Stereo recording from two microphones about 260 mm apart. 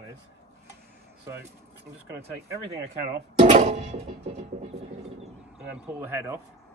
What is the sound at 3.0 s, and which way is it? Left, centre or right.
Speech, right.